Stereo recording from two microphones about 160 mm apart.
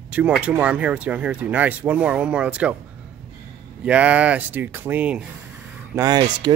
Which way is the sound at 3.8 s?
10° right (ahead or behind).